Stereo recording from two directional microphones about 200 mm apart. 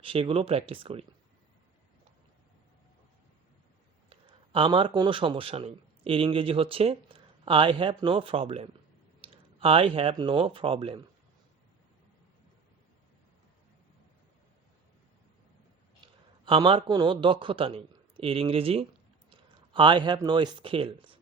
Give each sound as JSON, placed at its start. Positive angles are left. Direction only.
{"t": 0.0, "sound": "a man's voice", "side_deg": -25}
{"t": 4.1, "sound": "a man's voice", "side_deg": -25}
{"t": 16.5, "sound": "a man's voice", "side_deg": -25}